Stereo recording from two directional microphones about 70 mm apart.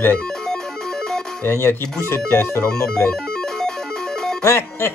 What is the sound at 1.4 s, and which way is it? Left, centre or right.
Speech, left.